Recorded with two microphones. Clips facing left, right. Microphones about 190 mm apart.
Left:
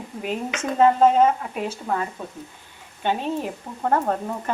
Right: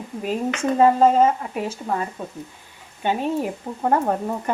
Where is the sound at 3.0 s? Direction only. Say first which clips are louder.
Right 2 dB; 15° right (ahead or behind).